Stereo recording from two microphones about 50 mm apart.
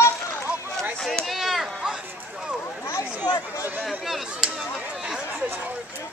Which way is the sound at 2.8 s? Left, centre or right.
Left.